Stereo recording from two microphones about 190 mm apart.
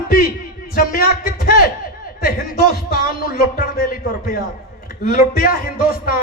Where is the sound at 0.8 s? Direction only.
50° left (ahead or behind).